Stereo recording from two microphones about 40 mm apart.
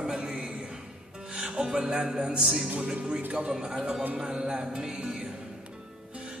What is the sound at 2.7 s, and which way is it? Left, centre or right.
Speech, right.